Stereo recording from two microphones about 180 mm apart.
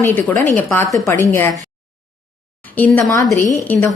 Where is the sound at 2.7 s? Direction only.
10° left (ahead or behind).